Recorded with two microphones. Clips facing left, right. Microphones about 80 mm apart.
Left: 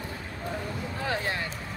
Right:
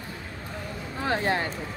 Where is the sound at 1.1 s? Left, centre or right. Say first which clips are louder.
Right 6 dB; right.